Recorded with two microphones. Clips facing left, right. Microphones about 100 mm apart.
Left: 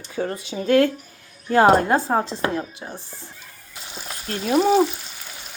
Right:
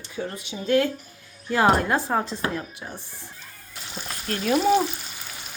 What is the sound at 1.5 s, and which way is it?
Speech, 35° left (ahead or behind).